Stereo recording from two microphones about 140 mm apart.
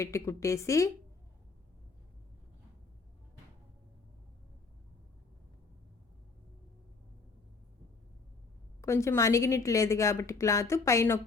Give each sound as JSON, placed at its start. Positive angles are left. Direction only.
{"t": 0.0, "sound": "a woman's voice", "side_deg": 20}
{"t": 8.8, "sound": "a woman's voice", "side_deg": 20}